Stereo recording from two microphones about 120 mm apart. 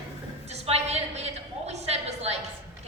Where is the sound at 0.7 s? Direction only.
65° right (ahead or behind).